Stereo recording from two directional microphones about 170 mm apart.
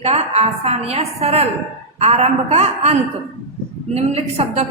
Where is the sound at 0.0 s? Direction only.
40° right (ahead or behind).